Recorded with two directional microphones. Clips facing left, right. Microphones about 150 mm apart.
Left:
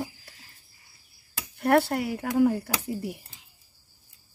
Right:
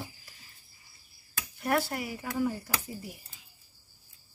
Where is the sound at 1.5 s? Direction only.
65° left (ahead or behind).